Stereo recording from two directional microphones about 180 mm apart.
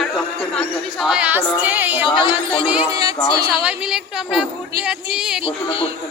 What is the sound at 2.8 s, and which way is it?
Speech, 20° right (ahead or behind).